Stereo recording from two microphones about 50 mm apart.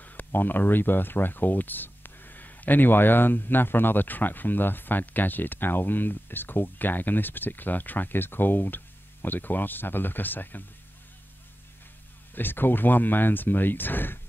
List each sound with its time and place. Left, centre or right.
0.0 s speech: left
12.4 s speech: left